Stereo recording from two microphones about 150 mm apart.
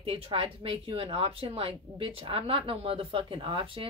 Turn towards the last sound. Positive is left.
turn(degrees=-35)  # may be behind; listen again after turning